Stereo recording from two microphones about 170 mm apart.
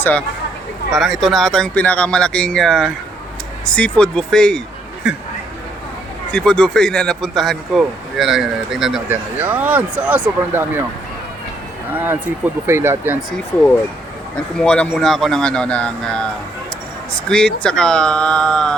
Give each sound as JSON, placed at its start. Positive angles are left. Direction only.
{"t": 0.0, "sound": "speech", "side_deg": 5}
{"t": 6.3, "sound": "speech", "side_deg": 5}
{"t": 12.6, "sound": "speech", "side_deg": -15}
{"t": 14.6, "sound": "speech", "side_deg": 5}